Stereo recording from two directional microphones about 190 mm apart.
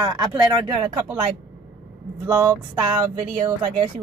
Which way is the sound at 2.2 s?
15° right (ahead or behind).